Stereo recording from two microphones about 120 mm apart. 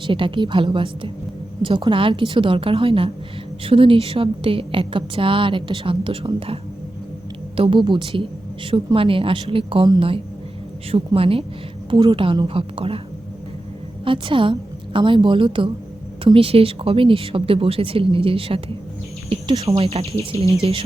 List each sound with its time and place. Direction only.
0.1 s a woman's voice: 45° right (ahead or behind)
10.9 s a woman's voice: 50° right (ahead or behind)
14.0 s a woman's voice: 45° right (ahead or behind)